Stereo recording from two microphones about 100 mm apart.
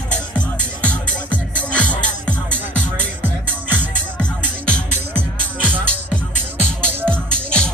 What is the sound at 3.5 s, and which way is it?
Music, 20° right (ahead or behind).